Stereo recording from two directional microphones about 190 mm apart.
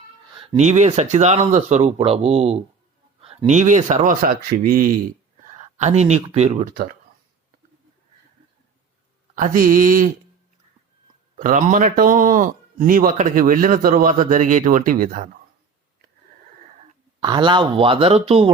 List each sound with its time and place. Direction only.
0.3 s speech: 35° right (ahead or behind)
9.3 s speech: 45° right (ahead or behind)
11.3 s speech: 40° right (ahead or behind)
17.2 s speech: 25° right (ahead or behind)